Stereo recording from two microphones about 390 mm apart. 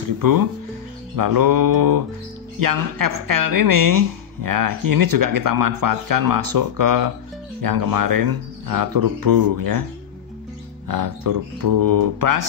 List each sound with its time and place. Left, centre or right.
0.0 s a woman's voice: right
10.9 s a woman's voice: right